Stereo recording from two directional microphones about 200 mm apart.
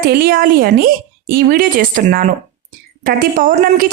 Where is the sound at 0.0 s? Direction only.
50° right (ahead or behind).